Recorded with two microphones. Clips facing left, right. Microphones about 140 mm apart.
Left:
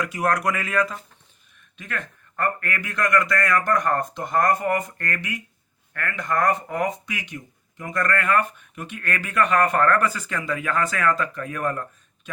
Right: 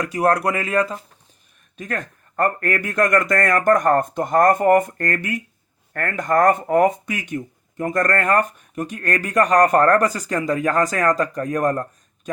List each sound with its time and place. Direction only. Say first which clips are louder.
0.0 s speech: right 4 dB; 35° right (ahead or behind)